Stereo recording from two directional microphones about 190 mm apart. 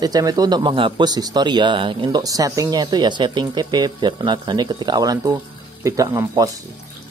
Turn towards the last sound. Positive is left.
turn(degrees=-15)  # may be behind; listen again after turning